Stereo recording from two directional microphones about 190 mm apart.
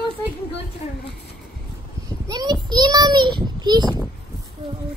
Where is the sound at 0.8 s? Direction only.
35° left (ahead or behind).